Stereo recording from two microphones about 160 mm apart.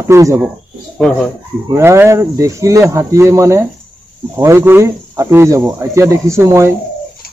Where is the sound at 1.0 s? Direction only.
5° left (ahead or behind).